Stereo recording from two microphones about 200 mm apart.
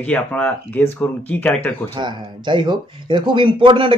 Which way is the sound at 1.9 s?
25° right (ahead or behind).